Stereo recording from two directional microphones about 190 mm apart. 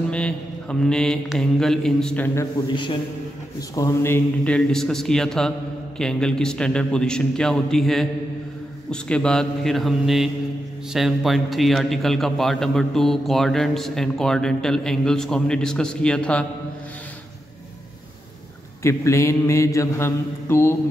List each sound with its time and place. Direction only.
0.1 s mantra: 5° left (ahead or behind)
2.7 s a man's voice: 25° left (ahead or behind)
3.7 s a man's voice: 15° left (ahead or behind)
18.8 s mantra: 15° left (ahead or behind)